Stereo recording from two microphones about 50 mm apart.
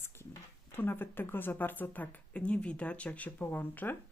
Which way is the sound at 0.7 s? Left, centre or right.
Left.